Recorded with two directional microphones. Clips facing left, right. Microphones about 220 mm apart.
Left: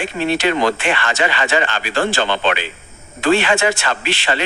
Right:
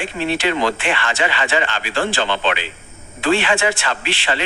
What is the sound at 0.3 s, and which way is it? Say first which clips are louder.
A man's voice: left 2 dB; 45° left (ahead or behind).